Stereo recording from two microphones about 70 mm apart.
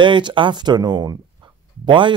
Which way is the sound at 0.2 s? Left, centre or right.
Right.